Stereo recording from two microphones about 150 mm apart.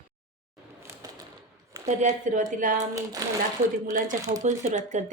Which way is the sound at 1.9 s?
55° right (ahead or behind).